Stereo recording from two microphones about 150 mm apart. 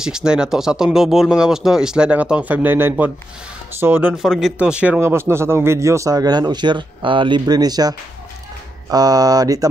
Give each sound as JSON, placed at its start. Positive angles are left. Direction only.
{"t": 0.0, "sound": "speech", "side_deg": -5}
{"t": 4.2, "sound": "speech", "side_deg": 0}
{"t": 8.9, "sound": "speech", "side_deg": -25}